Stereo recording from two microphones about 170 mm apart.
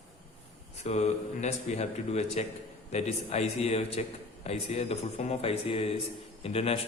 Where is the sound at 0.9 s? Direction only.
40° left (ahead or behind).